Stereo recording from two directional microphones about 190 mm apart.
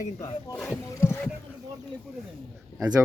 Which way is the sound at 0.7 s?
15° left (ahead or behind).